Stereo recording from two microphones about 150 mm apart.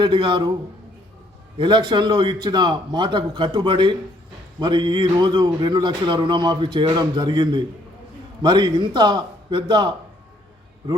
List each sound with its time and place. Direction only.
0.0 s speech: 30° right (ahead or behind)
1.5 s a man's voice: 30° right (ahead or behind)